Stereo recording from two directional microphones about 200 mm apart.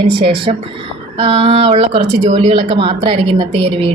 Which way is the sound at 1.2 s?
30° right (ahead or behind).